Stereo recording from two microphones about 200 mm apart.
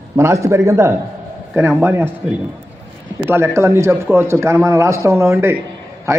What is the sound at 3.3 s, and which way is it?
A man's voice, 15° right (ahead or behind).